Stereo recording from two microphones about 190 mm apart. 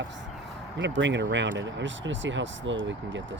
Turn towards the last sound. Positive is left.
turn(degrees=-75)  # may be behind; listen again after turning